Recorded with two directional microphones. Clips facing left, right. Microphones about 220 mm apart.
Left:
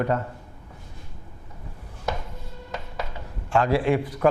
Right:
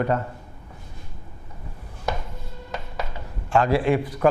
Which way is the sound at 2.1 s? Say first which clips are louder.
Right 1 dB; 10° right (ahead or behind).